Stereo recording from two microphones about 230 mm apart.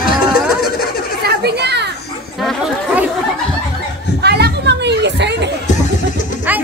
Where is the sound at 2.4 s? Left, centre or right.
Centre.